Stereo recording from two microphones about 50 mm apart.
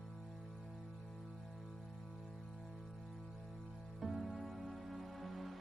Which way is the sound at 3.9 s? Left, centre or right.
Centre.